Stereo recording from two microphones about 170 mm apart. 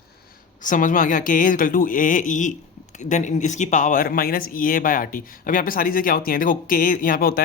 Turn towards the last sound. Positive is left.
turn(degrees=60)  # may be behind; listen again after turning